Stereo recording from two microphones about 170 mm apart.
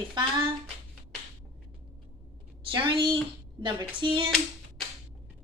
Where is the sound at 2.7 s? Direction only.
30° right (ahead or behind).